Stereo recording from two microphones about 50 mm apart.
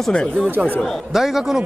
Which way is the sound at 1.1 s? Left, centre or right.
Centre.